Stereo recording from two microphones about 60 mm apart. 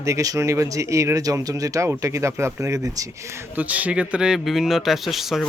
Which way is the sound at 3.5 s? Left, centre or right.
Right.